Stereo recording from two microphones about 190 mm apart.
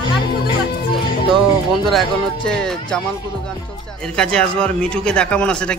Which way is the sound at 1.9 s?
Centre (ahead or behind).